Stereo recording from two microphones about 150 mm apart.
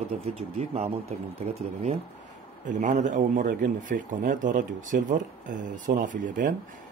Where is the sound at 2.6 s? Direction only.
55° right (ahead or behind).